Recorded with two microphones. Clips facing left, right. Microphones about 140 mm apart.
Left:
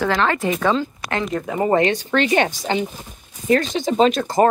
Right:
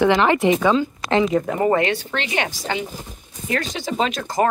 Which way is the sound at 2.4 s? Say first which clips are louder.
Left 4 dB; 25° left (ahead or behind).